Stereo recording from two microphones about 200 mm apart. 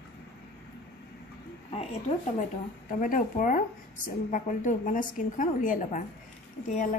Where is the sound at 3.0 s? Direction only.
40° left (ahead or behind).